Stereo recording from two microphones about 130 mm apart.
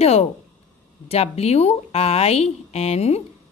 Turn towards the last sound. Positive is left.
turn(degrees=55)  # may be behind; listen again after turning